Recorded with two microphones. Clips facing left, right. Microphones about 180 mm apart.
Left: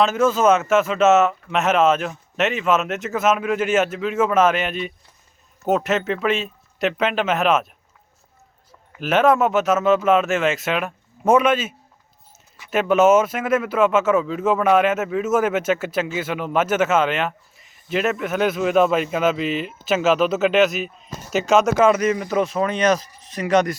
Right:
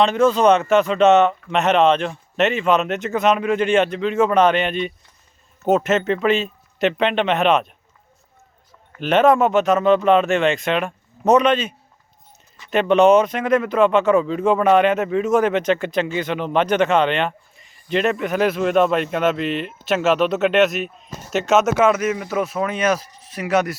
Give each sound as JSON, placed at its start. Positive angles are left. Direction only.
{"t": 0.0, "sound": "speech", "side_deg": 5}
{"t": 8.9, "sound": "speech", "side_deg": 5}